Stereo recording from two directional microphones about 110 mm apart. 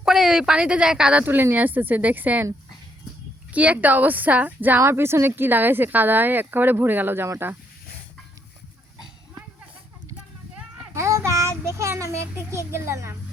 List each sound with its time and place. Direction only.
0.0 s speech: 5° right (ahead or behind)
1.2 s speech: 20° right (ahead or behind)
3.5 s speech: 10° right (ahead or behind)
10.9 s child singing: 25° right (ahead or behind)
11.8 s a child's voice: 25° right (ahead or behind)